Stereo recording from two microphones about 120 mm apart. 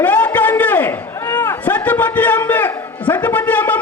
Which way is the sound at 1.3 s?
15° left (ahead or behind).